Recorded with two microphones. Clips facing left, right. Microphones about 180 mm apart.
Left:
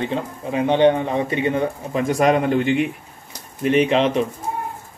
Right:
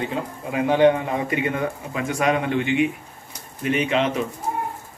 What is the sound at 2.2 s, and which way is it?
A man's voice, 40° left (ahead or behind).